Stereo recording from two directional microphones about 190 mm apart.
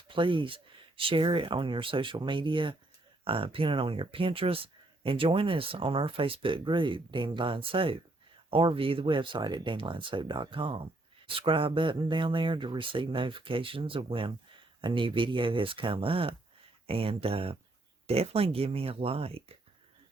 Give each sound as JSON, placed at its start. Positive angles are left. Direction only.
{"t": 0.1, "sound": "speech", "side_deg": -25}